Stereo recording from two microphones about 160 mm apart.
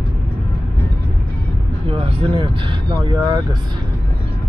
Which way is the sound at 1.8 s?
35° right (ahead or behind).